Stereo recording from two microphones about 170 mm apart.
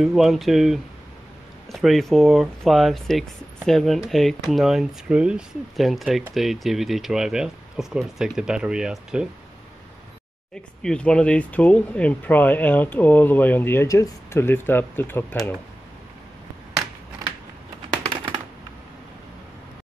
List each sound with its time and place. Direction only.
0.0 s speech: centre (ahead or behind)
10.8 s speech: 5° left (ahead or behind)
18.0 s typewriter: 30° right (ahead or behind)